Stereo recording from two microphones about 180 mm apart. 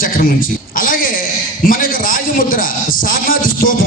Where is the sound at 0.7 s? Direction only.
50° left (ahead or behind).